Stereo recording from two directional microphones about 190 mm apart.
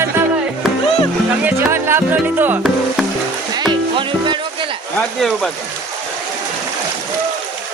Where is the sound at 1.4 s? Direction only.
15° right (ahead or behind).